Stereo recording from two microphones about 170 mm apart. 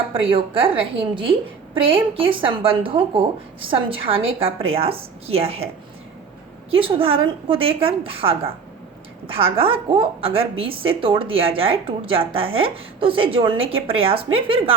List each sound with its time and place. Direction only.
0.1 s a woman's voice: 30° right (ahead or behind)
6.7 s a woman's voice: 30° right (ahead or behind)